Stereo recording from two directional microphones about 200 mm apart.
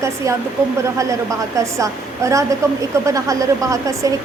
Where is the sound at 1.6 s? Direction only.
15° right (ahead or behind).